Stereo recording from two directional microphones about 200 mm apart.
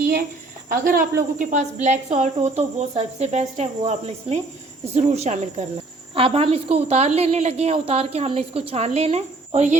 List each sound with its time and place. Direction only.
0.7 s a woman's voice: 45° right (ahead or behind)